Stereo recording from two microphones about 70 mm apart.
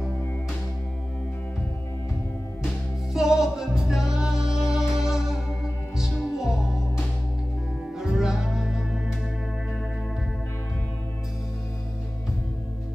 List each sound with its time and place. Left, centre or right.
3.1 s music: centre
8.0 s music: centre